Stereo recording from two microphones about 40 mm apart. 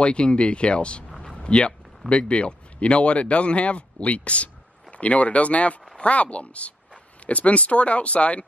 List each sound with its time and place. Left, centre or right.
0.0 s speech: left
1.2 s a sound: left
2.0 s speech: left